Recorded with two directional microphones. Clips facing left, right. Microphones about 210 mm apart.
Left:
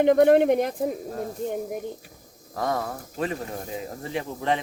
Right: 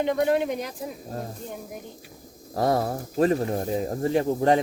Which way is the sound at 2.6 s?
35° right (ahead or behind).